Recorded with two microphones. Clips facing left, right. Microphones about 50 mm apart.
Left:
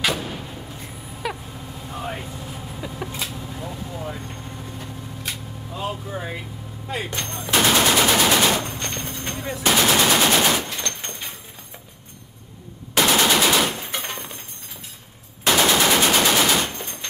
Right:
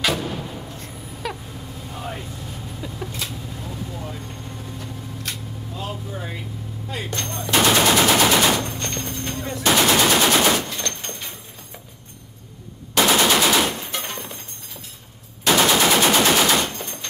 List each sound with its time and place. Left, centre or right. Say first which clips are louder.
0.0 s artillery fire: right 1 dB; centre
0.7 s a sound: right 1 dB; centre
1.9 s vehicle: left 2 dB; centre
6.9 s a sound: left 1 dB; centre
7.6 s machine gun: right 1 dB; centre
9.7 s machine gun: right 1 dB; centre
13.0 s machine gun: right 1 dB; centre
15.6 s machine gun: right 1 dB; centre